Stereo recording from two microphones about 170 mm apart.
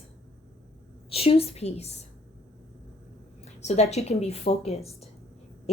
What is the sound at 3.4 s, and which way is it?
A woman's voice, 40° left (ahead or behind).